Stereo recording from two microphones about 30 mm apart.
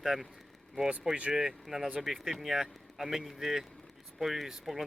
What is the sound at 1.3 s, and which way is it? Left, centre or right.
A man's voice, right.